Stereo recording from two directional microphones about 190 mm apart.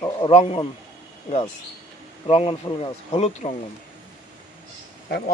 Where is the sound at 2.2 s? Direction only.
30° left (ahead or behind).